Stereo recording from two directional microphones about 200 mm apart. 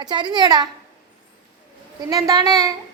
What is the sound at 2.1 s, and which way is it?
Speech, 20° right (ahead or behind).